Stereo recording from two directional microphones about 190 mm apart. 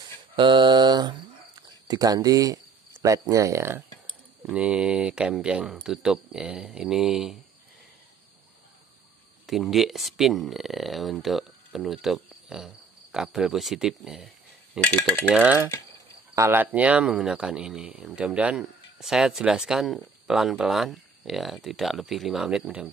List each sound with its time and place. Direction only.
0.4 s mantra: 25° right (ahead or behind)
1.9 s speech: 20° right (ahead or behind); by 7.3 s 5° right (ahead or behind)
9.5 s speech: centre (ahead or behind)
14.8 s dishes: 10° left (ahead or behind)
15.3 s mechanisms: 10° right (ahead or behind)
16.3 s speech: 10° right (ahead or behind)